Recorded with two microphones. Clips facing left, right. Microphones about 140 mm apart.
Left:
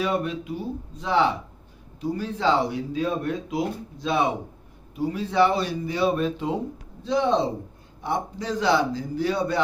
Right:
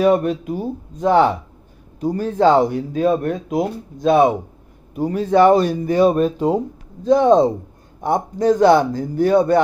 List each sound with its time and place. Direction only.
0.0 s speech: 50° right (ahead or behind)